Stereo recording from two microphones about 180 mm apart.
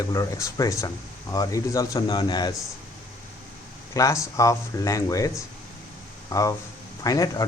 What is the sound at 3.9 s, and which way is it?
Speech, 15° left (ahead or behind).